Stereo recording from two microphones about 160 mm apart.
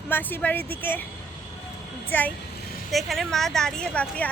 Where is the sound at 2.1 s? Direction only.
15° left (ahead or behind).